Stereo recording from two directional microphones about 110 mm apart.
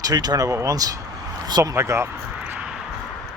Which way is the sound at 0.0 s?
35° right (ahead or behind).